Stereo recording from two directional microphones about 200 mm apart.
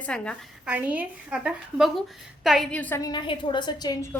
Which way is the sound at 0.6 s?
10° right (ahead or behind).